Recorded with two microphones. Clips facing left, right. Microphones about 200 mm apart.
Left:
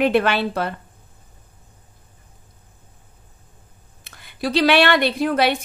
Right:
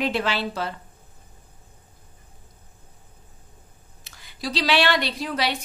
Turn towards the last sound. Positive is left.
turn(degrees=55)  # may be behind; listen again after turning